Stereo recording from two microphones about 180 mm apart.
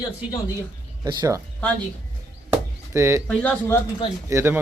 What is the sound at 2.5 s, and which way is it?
Chopping, 15° right (ahead or behind).